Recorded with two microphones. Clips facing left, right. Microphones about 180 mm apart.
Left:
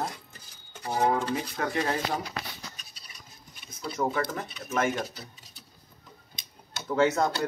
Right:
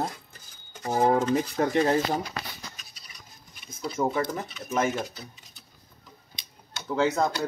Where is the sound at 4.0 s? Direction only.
10° right (ahead or behind).